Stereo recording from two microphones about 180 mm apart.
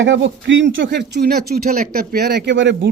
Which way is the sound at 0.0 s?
90° right.